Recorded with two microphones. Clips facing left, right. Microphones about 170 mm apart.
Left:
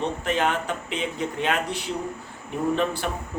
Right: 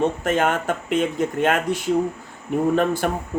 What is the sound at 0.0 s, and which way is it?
Speech, 50° right (ahead or behind).